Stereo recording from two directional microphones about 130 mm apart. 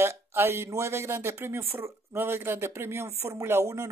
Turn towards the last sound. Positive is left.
turn(degrees=-20)  # may be behind; listen again after turning